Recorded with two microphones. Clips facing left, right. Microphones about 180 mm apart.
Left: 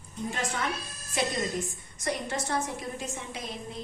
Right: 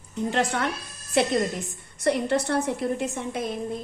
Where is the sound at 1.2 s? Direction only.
65° right (ahead or behind).